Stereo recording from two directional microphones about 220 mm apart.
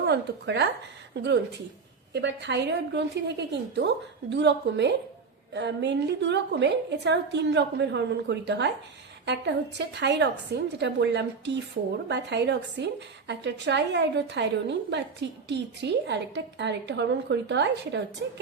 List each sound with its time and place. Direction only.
0.1 s a woman's voice: 50° right (ahead or behind)